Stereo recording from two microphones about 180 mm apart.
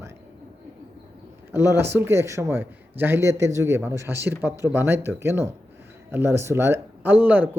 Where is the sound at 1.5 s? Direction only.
15° right (ahead or behind).